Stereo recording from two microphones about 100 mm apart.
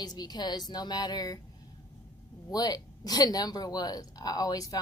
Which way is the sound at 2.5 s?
40° left (ahead or behind).